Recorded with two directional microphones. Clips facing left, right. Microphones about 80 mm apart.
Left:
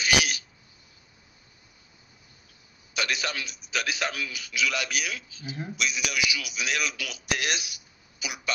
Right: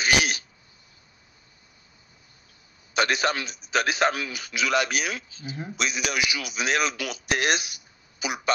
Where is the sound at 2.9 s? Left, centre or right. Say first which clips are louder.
Right 7 dB; right.